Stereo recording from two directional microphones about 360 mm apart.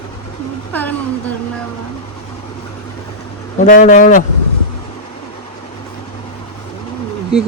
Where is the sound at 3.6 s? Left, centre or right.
Left.